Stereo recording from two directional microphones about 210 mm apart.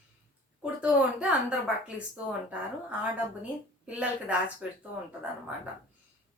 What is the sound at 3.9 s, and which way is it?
Speech, 5° right (ahead or behind).